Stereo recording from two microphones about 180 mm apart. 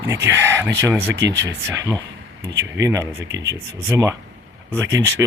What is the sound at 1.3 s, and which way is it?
Speech, 80° right.